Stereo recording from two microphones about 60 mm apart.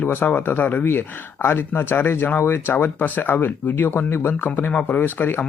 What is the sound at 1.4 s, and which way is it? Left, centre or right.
Speech, left.